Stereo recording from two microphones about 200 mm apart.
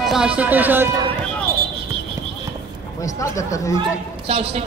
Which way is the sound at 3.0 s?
15° left (ahead or behind).